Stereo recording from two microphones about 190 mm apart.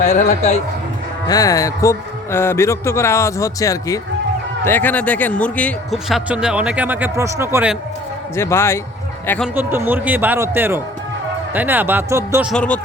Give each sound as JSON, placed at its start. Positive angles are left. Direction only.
{"t": 0.0, "sound": "a man's voice", "side_deg": 40}
{"t": 1.3, "sound": "a man's voice", "side_deg": 20}
{"t": 8.4, "sound": "speech", "side_deg": 15}
{"t": 9.6, "sound": "speech", "side_deg": -10}
{"t": 12.5, "sound": "a man's voice", "side_deg": 5}